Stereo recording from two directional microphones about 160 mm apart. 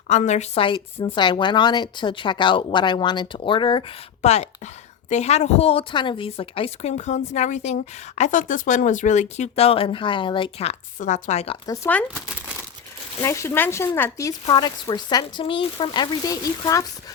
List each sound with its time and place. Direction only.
0.1 s a woman's voice: 45° left (ahead or behind)
11.6 s speech: 20° left (ahead or behind)
11.9 s speech: 10° left (ahead or behind)
13.2 s speech: 15° left (ahead or behind)